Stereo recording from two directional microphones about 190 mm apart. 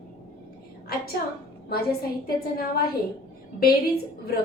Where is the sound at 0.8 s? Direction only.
50° left (ahead or behind).